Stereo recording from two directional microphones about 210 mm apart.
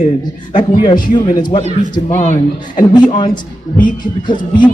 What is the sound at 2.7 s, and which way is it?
Speech, 20° left (ahead or behind).